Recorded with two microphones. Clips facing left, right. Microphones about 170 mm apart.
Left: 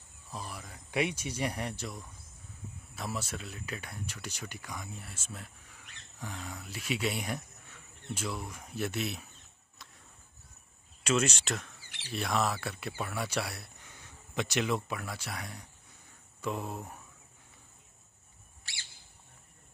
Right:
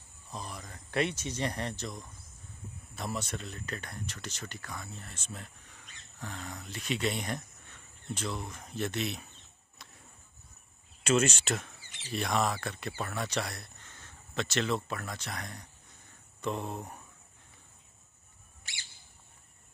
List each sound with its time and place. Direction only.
0.3 s speech: 5° left (ahead or behind)
9.8 s a sound: centre (ahead or behind)
11.1 s speech: centre (ahead or behind)
18.6 s bird: 20° right (ahead or behind)